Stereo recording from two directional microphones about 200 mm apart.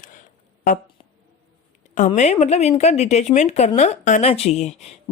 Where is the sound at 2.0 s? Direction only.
35° left (ahead or behind).